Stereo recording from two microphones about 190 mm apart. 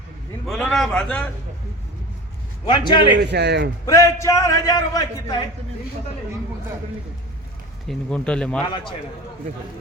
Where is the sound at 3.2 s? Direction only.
60° right (ahead or behind).